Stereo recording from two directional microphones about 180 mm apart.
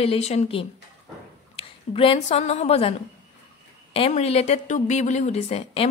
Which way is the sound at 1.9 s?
30° left (ahead or behind).